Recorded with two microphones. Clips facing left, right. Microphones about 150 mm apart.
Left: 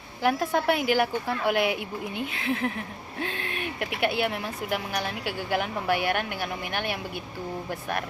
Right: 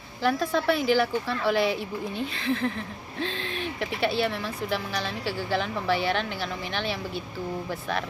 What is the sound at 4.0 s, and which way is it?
A woman's voice, 15° left (ahead or behind).